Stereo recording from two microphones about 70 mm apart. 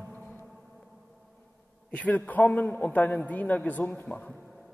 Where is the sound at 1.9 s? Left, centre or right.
Centre.